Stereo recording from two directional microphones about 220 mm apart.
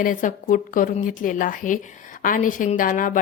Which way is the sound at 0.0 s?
35° left (ahead or behind).